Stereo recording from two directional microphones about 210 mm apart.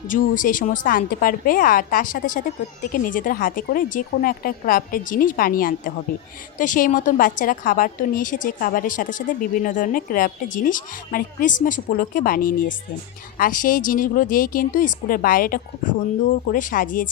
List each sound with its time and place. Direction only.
0.1 s a woman's voice: 40° left (ahead or behind)